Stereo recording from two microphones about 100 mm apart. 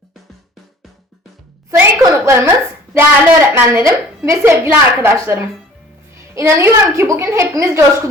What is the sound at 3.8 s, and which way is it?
A woman's voice, 30° right (ahead or behind).